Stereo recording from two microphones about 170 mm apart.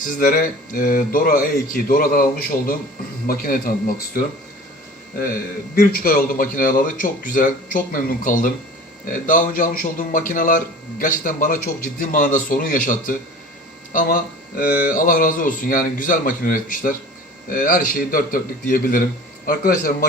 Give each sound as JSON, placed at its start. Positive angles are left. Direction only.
{"t": 0.0, "sound": "a man's voice", "side_deg": 50}